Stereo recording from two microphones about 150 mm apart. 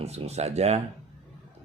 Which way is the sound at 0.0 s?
45° right (ahead or behind).